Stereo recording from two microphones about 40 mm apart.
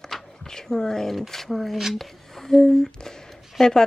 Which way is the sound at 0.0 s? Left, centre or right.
Centre.